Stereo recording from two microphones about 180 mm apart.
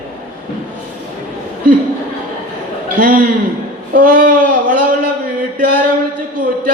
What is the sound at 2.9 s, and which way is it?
A man's voice, 50° right (ahead or behind).